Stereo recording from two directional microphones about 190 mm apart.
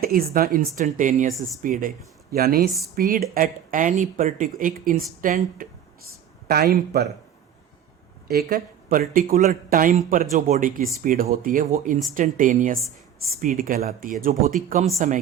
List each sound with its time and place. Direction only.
0.0 s speech: 50° right (ahead or behind)
8.3 s a woman's voice: 55° right (ahead or behind)